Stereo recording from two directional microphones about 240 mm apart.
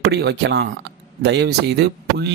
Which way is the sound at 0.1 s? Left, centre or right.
Right.